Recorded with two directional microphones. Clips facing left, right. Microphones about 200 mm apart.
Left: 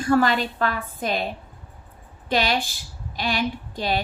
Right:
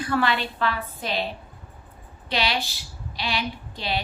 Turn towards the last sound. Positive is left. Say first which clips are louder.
# left 4 dB
turn(degrees=45)  # may be behind; listen again after turning